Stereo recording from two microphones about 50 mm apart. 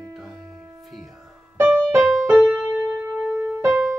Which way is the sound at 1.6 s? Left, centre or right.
Right.